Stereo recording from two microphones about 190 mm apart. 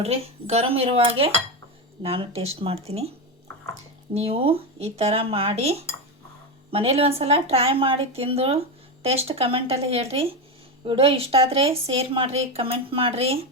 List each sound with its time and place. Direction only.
0.0 s speech: 35° right (ahead or behind)
4.1 s speech: 30° right (ahead or behind)